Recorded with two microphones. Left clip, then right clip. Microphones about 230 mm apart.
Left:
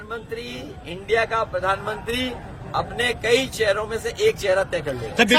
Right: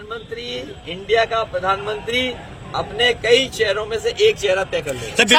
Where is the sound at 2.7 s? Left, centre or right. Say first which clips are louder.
Right 5 dB; left.